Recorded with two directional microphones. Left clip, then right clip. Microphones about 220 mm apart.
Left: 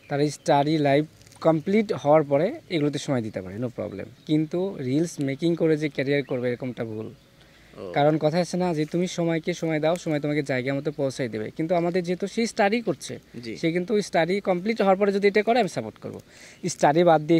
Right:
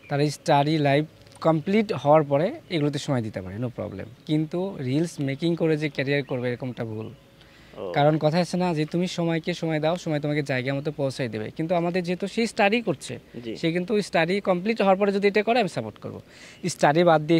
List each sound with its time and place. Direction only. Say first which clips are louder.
0.1 s speech: even; 35° left (ahead or behind)